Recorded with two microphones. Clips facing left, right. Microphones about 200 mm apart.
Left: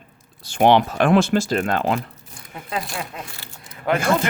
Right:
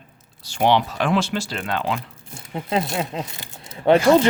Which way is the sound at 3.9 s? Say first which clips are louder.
Right 6 dB; 55° left (ahead or behind).